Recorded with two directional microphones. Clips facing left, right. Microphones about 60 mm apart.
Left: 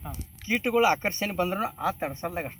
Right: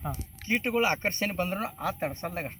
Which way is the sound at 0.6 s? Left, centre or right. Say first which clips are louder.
Left 5 dB; right.